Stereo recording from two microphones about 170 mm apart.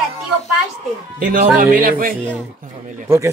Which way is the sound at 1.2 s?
55° right (ahead or behind).